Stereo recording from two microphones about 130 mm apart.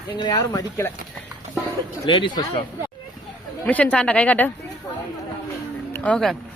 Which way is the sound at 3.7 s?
10° left (ahead or behind).